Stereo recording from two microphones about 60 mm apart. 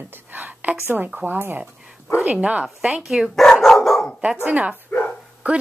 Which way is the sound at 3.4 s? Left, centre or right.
Centre.